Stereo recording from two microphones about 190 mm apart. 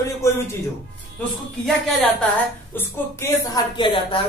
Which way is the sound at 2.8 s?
20° left (ahead or behind).